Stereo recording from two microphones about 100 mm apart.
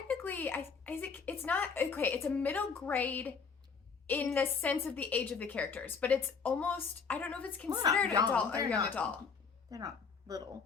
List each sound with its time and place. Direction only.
0.1 s a woman's voice: 20° left (ahead or behind)
7.7 s a woman's voice: 40° right (ahead or behind)
8.3 s a woman's voice: 15° left (ahead or behind)
9.6 s speech: 35° right (ahead or behind)